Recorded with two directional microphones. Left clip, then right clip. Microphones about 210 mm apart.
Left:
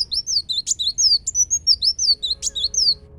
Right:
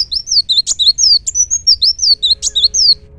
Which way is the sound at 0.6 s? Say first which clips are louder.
Right 9 dB; centre (ahead or behind).